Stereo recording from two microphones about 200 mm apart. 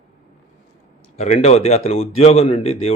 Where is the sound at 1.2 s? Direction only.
35° left (ahead or behind).